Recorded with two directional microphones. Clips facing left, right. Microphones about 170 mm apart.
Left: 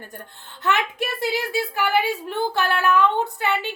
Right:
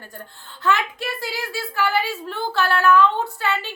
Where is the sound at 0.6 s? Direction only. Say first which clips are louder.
Right 1 dB; 20° left (ahead or behind).